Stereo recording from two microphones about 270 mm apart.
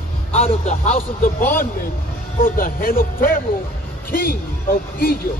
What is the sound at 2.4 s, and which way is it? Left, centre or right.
Speech, left.